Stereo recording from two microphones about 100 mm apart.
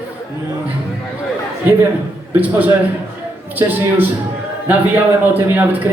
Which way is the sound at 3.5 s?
20° right (ahead or behind).